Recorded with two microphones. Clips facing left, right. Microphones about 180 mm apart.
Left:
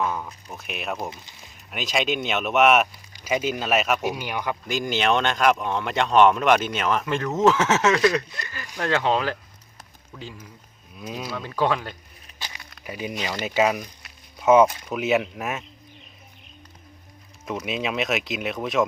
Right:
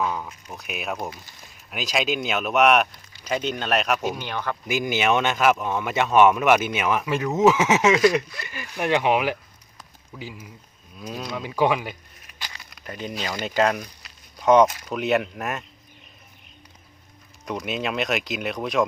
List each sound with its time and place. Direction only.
0.0 s speech: centre (ahead or behind)
4.6 s speech: 10° right (ahead or behind)
10.9 s speech: 5° left (ahead or behind)
11.3 s speech: 10° right (ahead or behind)
12.4 s a sound: 15° left (ahead or behind)
12.7 s speech: 10° left (ahead or behind)
17.4 s speech: centre (ahead or behind)